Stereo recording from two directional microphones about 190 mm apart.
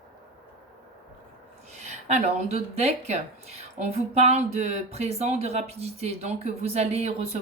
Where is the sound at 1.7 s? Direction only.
35° right (ahead or behind).